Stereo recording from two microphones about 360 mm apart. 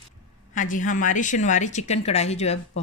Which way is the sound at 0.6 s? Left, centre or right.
Left.